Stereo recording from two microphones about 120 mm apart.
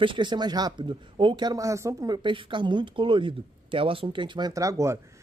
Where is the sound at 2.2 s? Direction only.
40° right (ahead or behind); by 4.9 s 25° right (ahead or behind).